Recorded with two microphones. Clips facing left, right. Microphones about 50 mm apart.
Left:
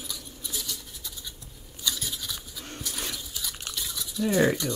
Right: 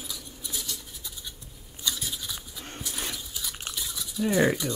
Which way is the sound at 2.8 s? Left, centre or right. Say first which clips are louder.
Even; centre.